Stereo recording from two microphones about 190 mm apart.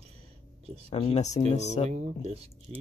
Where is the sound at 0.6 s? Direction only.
30° right (ahead or behind).